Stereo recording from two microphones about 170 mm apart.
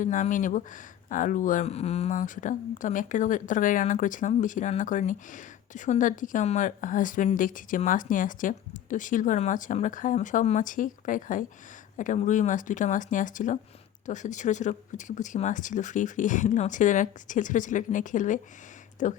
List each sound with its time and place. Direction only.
0.0 s speech: 50° left (ahead or behind)